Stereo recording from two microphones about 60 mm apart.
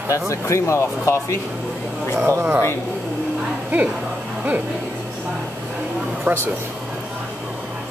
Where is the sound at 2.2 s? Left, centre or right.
Right.